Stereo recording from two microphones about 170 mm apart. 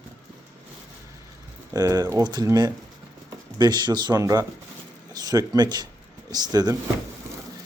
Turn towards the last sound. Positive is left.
turn(degrees=-25)  # may be behind; listen again after turning